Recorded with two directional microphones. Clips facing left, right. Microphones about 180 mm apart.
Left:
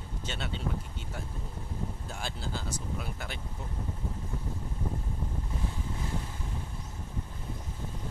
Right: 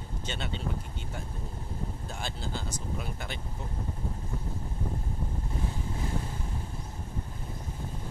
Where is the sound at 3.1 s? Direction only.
5° left (ahead or behind).